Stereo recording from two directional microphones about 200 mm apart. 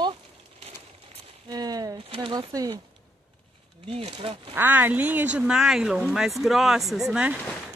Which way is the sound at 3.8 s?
25° right (ahead or behind).